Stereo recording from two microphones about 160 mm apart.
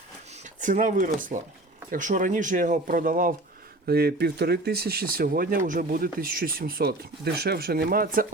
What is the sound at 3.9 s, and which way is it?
Speech, 85° right.